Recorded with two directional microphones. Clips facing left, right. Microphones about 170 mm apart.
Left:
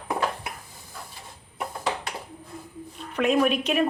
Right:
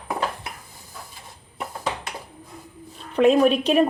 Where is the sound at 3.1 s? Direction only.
30° right (ahead or behind).